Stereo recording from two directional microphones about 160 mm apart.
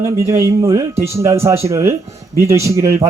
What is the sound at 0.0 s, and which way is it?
Speech, 15° right (ahead or behind).